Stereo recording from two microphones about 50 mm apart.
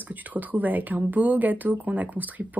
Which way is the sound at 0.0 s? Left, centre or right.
Right.